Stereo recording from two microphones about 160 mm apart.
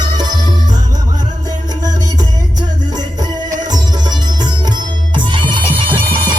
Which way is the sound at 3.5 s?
25° right (ahead or behind).